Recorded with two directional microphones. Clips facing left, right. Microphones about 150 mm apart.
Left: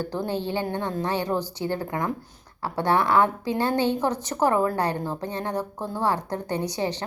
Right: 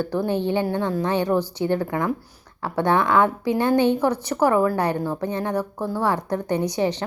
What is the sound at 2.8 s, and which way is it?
A woman's voice, 20° right (ahead or behind).